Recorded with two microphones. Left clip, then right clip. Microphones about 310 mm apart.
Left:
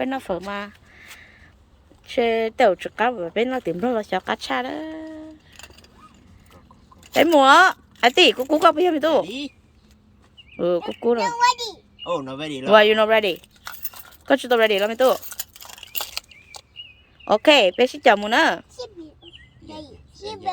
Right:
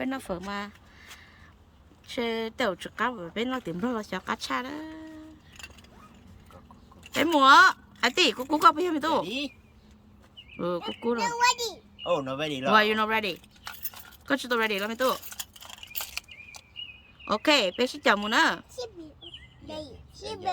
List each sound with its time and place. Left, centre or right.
0.0 s speech: centre
7.2 s speech: centre
9.2 s speech: centre
10.6 s a child's voice: centre
12.7 s speech: centre
15.3 s keys jangling: left
17.2 s speech: centre
19.8 s a sound: centre